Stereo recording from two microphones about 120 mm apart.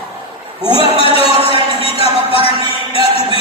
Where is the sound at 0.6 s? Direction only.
50° left (ahead or behind).